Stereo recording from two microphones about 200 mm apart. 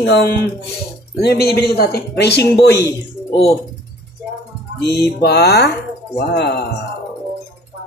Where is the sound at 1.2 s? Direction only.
50° left (ahead or behind).